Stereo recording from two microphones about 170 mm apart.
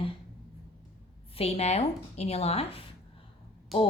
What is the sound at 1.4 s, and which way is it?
A woman's voice, 35° left (ahead or behind).